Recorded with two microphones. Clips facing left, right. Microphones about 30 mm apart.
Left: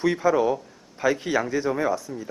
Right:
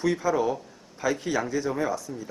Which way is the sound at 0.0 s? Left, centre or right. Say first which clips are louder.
Left 3 dB; centre.